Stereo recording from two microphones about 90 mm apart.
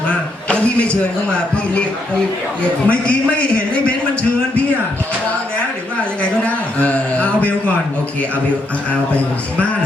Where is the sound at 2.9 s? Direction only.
15° left (ahead or behind).